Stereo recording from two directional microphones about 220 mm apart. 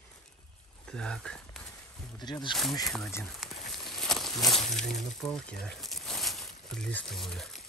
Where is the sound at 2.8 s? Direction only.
Centre (ahead or behind).